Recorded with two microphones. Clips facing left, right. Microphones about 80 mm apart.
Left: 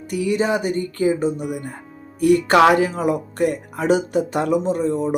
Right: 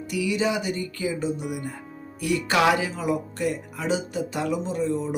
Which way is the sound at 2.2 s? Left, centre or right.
Left.